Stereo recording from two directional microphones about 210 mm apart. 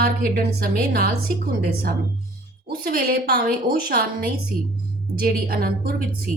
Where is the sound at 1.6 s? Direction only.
45° right (ahead or behind).